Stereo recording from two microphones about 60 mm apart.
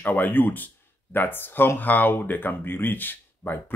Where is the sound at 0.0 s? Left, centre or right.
Left.